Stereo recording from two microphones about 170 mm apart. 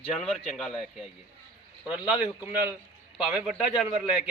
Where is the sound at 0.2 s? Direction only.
Centre (ahead or behind).